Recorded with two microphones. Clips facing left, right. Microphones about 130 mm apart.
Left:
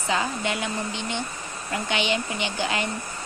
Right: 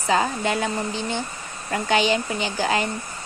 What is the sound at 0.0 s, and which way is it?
Speech, 40° right (ahead or behind).